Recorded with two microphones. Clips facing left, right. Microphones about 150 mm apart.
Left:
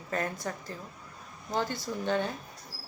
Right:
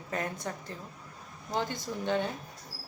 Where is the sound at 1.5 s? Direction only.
20° right (ahead or behind).